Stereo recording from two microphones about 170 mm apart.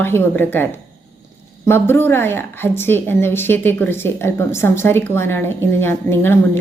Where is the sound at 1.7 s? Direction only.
15° left (ahead or behind).